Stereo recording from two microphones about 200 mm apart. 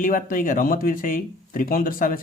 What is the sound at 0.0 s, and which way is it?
Speech, 45° left (ahead or behind).